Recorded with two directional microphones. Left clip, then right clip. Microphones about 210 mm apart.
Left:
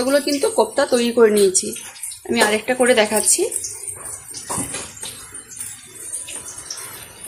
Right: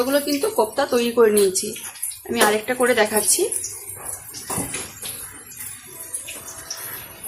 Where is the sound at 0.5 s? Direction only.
25° left (ahead or behind).